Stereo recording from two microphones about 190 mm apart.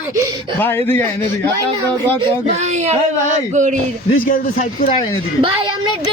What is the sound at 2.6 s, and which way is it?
Speech, 35° right (ahead or behind).